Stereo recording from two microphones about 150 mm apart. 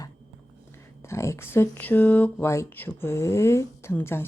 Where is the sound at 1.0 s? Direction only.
20° left (ahead or behind).